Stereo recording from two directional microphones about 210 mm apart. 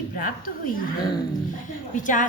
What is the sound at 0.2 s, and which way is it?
Speech, 40° left (ahead or behind).